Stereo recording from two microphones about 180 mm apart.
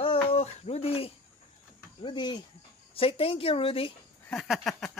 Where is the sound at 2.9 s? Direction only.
30° left (ahead or behind).